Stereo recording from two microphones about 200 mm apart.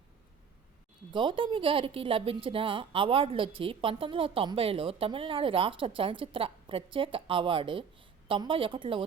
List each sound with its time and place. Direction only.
1.1 s a woman's voice: 25° right (ahead or behind)